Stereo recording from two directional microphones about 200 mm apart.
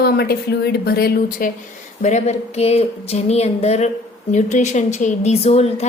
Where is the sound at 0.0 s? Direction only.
55° left (ahead or behind).